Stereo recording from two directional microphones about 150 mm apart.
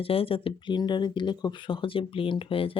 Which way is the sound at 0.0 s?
40° left (ahead or behind).